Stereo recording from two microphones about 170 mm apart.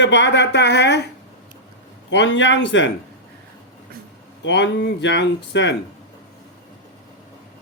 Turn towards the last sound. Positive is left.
turn(degrees=90)